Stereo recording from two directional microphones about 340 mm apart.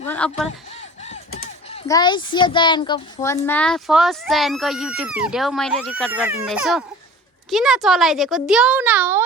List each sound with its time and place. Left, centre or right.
0.1 s speech: centre
1.0 s a sound: centre
1.9 s a child's voice: centre